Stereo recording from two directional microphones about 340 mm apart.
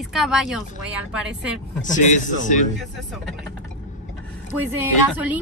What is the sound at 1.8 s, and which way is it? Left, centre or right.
Speech, left.